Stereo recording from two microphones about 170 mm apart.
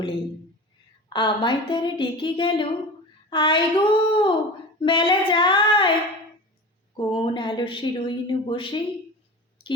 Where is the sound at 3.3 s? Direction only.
30° left (ahead or behind).